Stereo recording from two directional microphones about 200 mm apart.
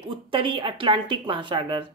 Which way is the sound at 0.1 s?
25° right (ahead or behind).